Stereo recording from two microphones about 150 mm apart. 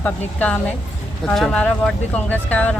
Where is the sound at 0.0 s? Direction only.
10° left (ahead or behind).